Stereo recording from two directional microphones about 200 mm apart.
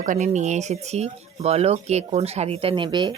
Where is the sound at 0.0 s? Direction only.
40° right (ahead or behind).